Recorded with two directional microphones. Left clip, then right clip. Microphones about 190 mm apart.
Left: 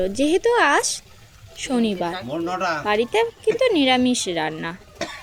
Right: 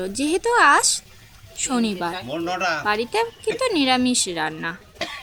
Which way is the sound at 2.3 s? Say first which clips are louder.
Even; 40° left (ahead or behind).